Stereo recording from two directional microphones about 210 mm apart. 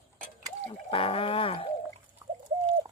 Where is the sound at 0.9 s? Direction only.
25° left (ahead or behind).